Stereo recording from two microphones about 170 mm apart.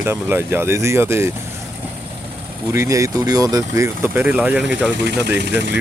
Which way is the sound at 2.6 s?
15° right (ahead or behind).